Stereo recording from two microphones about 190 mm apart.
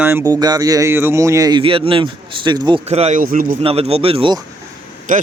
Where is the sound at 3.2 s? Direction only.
50° right (ahead or behind).